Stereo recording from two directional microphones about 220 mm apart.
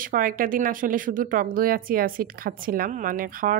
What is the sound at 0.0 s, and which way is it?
A woman's voice, 40° right (ahead or behind).